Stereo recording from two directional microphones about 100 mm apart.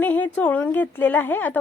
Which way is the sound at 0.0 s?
15° left (ahead or behind).